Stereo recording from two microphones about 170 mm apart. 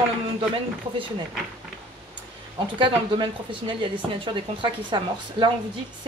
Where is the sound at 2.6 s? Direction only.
30° right (ahead or behind).